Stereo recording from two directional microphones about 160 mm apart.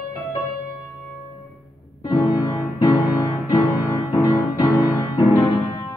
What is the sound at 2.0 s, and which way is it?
Music, 25° left (ahead or behind).